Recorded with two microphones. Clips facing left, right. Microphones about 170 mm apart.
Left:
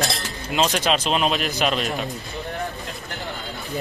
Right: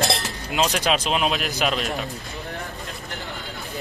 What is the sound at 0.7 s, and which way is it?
Speech, 5° right (ahead or behind).